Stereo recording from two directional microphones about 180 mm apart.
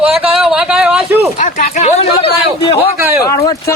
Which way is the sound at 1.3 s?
45° left (ahead or behind).